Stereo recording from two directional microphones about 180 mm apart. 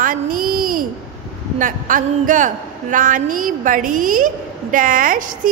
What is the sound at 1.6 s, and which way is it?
A woman's voice, 45° right (ahead or behind).